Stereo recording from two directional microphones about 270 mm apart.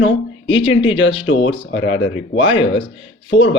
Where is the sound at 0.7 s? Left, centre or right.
Left.